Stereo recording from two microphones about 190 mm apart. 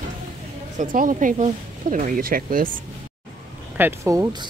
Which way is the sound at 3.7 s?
10° right (ahead or behind).